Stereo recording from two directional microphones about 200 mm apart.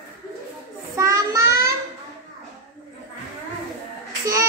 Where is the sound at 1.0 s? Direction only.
15° right (ahead or behind).